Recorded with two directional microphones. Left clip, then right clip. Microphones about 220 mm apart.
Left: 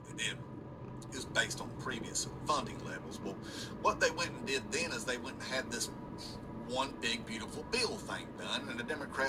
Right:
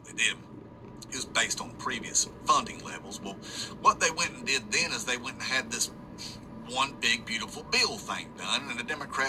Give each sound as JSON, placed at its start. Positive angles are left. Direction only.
{"t": 1.1, "sound": "a man's voice", "side_deg": -20}